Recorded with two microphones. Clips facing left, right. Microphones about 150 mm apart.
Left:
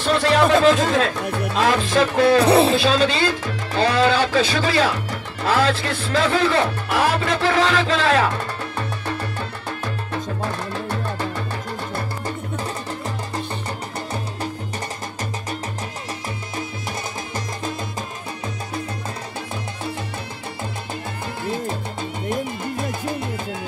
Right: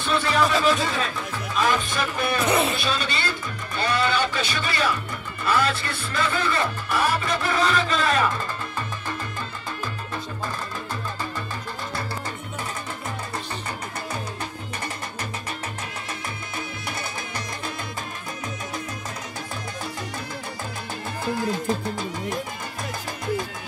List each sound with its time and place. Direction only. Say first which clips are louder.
0.0 s music: left 5 dB; 75° left (ahead or behind); by 0.9 s 50° left (ahead or behind)
0.9 s speech: left 8 dB; 75° left (ahead or behind)
2.4 s speech: left 7 dB; 30° left (ahead or behind)
2.7 s speech: left 9 dB; 90° left; by 9.2 s 65° left (ahead or behind)
10.4 s music: left 5 dB; 65° left (ahead or behind)